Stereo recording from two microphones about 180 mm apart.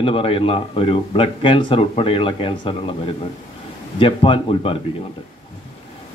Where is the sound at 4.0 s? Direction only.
30° left (ahead or behind).